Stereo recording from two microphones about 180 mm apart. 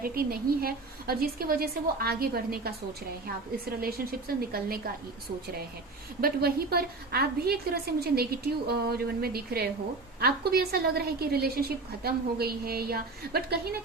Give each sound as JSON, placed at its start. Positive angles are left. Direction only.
{"t": 0.0, "sound": "a woman's voice", "side_deg": -55}
{"t": 6.2, "sound": "a woman's voice", "side_deg": -60}